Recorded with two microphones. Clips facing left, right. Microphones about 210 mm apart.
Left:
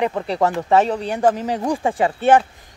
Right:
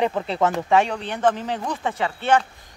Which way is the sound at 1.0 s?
40° left (ahead or behind).